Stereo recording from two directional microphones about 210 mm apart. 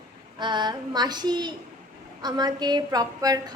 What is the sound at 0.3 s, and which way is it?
Child singing, 20° right (ahead or behind).